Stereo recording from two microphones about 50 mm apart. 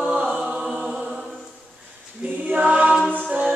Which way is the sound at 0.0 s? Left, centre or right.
Right.